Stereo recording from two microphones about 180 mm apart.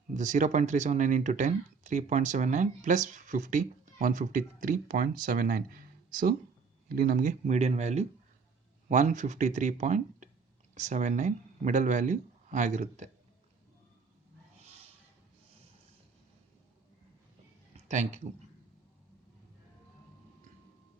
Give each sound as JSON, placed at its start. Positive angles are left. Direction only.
{"t": 0.1, "sound": "speech", "side_deg": -45}
{"t": 17.7, "sound": "speech", "side_deg": -40}